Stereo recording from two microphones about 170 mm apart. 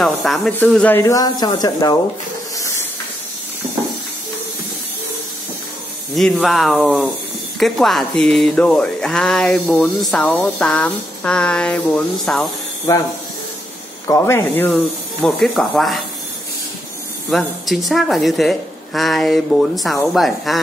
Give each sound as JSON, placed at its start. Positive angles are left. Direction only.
{"t": 0.0, "sound": "speech", "side_deg": 0}
{"t": 2.5, "sound": "hiss", "side_deg": 20}
{"t": 6.1, "sound": "speech", "side_deg": 0}
{"t": 12.9, "sound": "speech", "side_deg": 20}
{"t": 17.3, "sound": "speech", "side_deg": 0}